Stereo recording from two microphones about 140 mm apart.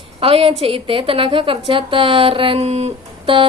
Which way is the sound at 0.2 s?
40° right (ahead or behind).